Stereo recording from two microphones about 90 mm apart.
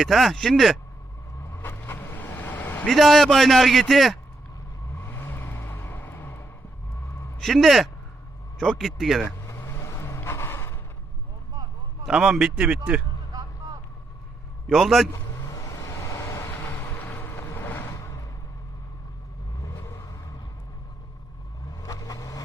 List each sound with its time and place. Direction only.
0.0 s a man's voice: centre (ahead or behind)
1.4 s vehicle: 25° left (ahead or behind)
2.9 s a man's voice: 5° left (ahead or behind)
4.9 s vehicle: 20° left (ahead or behind)
7.3 s a man's voice: 5° left (ahead or behind)
9.4 s vehicle: 30° left (ahead or behind)
12.0 s a man's voice: 5° right (ahead or behind)
14.7 s a man's voice: centre (ahead or behind)
15.1 s a sound: 35° left (ahead or behind)
16.5 s vehicle: 25° left (ahead or behind)
17.9 s a sound: 30° left (ahead or behind)
19.6 s vehicle: 35° left (ahead or behind)
21.7 s vehicle: 45° left (ahead or behind)